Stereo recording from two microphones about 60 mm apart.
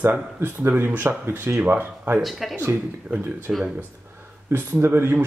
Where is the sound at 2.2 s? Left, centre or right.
Centre.